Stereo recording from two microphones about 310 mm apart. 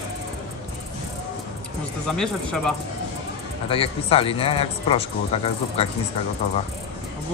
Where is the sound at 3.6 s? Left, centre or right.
Centre.